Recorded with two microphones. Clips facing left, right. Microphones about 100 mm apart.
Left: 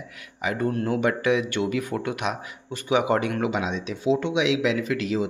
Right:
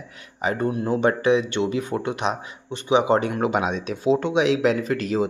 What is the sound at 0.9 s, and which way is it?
Speech, 30° right (ahead or behind).